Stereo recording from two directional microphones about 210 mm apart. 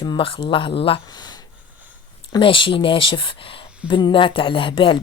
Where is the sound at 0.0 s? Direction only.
20° left (ahead or behind).